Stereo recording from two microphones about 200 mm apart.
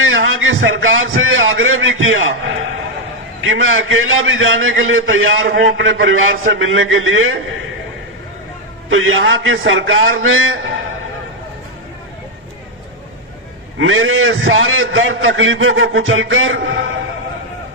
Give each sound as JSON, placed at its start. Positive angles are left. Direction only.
{"t": 0.0, "sound": "a sound", "side_deg": -85}
{"t": 3.4, "sound": "a man's voice", "side_deg": -80}
{"t": 8.9, "sound": "a man's voice", "side_deg": -80}
{"t": 13.7, "sound": "a man's voice", "side_deg": -80}